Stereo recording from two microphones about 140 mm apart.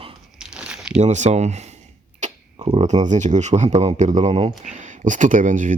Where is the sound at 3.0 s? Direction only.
60° right (ahead or behind); by 4.5 s 45° right (ahead or behind).